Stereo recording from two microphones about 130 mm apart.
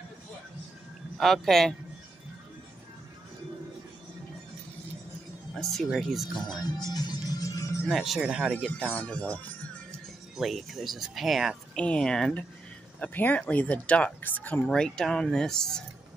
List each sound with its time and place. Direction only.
1.2 s speech: centre (ahead or behind)
5.5 s speech: centre (ahead or behind)
6.4 s music: 30° left (ahead or behind)
7.9 s speech: centre (ahead or behind)
8.6 s speech: 10° left (ahead or behind)
10.3 s speech: centre (ahead or behind)